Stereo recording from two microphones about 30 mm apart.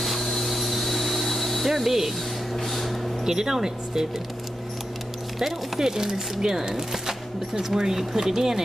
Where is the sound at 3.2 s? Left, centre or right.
Centre.